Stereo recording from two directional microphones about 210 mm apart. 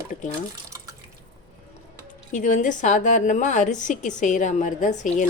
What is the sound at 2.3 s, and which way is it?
A woman's voice, 35° left (ahead or behind).